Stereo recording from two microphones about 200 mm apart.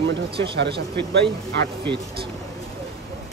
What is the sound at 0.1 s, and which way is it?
Speech, 55° right (ahead or behind).